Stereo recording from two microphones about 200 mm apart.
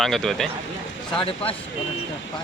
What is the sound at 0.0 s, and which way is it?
Speech, centre (ahead or behind).